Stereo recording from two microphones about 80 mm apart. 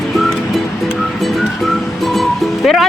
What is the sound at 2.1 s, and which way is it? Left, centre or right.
Music, centre.